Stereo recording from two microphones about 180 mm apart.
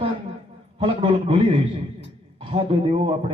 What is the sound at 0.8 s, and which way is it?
A man's voice, 30° right (ahead or behind).